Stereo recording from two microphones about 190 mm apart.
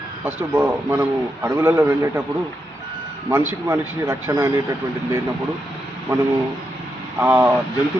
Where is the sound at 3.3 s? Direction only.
15° right (ahead or behind).